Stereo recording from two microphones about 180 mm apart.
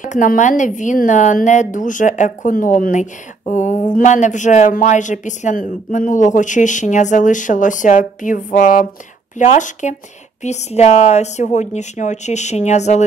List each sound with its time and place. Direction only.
0.0 s a woman's voice: 45° left (ahead or behind)